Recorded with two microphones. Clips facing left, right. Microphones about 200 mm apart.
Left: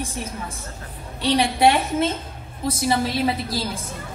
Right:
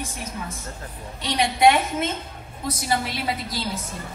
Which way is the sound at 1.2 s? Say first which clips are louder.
Left 3 dB; 30° left (ahead or behind).